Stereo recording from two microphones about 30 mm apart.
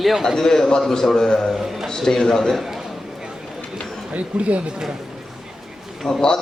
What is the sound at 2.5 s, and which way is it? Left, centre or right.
Speech, centre.